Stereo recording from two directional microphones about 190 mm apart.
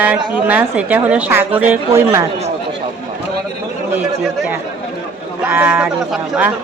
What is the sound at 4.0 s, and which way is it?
A woman's voice, 10° right (ahead or behind).